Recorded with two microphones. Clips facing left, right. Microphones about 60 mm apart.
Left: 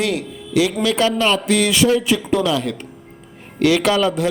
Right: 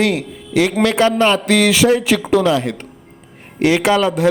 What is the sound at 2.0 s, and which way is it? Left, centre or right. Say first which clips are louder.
Speech: right 3 dB; right.